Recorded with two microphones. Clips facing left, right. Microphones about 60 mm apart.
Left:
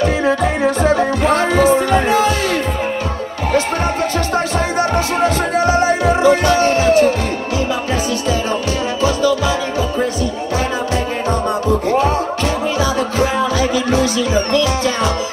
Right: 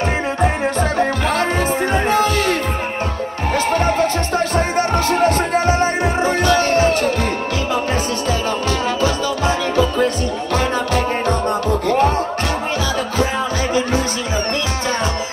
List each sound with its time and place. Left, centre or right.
1.5 s music: right
2.0 s music: right
5.9 s music: right